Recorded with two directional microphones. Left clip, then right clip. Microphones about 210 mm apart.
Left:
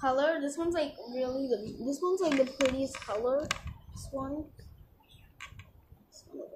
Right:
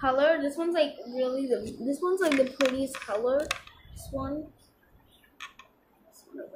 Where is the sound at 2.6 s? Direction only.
15° right (ahead or behind).